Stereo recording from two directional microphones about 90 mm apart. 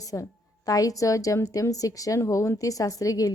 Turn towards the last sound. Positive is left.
turn(degrees=40)  # may be behind; listen again after turning